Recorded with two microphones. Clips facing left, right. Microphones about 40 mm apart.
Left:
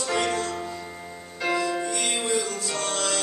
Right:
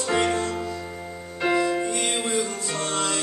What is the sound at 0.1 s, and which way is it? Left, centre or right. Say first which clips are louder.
Music: right 3 dB; right.